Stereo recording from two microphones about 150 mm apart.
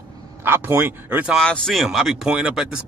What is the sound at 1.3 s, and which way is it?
Speech, 5° left (ahead or behind).